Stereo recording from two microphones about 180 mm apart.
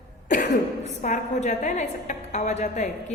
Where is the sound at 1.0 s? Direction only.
40° left (ahead or behind).